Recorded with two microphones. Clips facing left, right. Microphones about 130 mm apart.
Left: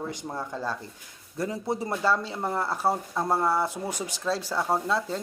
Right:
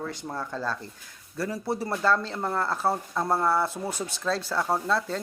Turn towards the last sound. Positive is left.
turn(degrees=15)  # may be behind; listen again after turning